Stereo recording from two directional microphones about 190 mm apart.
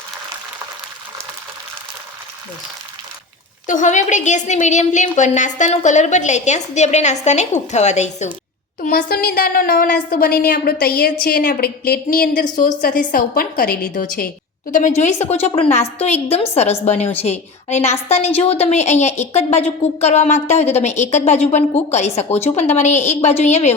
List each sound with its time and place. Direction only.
3.7 s a woman's voice: 40° left (ahead or behind)
8.8 s a woman's voice: 50° left (ahead or behind)